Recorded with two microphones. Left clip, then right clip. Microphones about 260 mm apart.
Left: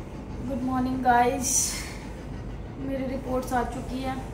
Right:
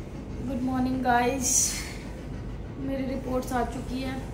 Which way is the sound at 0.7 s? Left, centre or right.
Centre.